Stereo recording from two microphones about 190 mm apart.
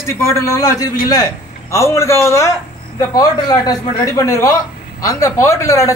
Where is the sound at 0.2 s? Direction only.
15° left (ahead or behind).